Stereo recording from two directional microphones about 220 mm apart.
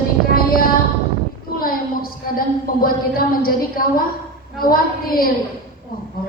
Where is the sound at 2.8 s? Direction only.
40° left (ahead or behind).